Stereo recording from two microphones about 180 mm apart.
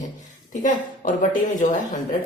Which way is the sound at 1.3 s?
45° left (ahead or behind).